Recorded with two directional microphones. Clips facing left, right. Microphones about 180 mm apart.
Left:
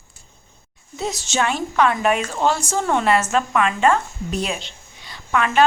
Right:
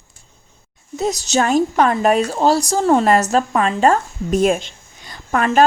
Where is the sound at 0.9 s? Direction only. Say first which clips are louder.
Right 5 dB; 45° right (ahead or behind).